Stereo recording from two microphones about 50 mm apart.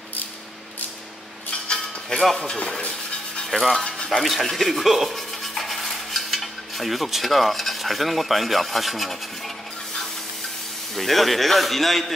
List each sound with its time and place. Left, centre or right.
1.5 s music: centre
2.5 s a sound: centre
3.4 s speech: centre
3.8 s music: centre
4.2 s speech: centre
5.5 s cutlery: centre
11.0 s speech: centre